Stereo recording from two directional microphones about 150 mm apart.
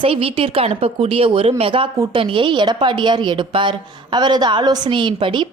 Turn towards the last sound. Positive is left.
turn(degrees=-35)  # may be behind; listen again after turning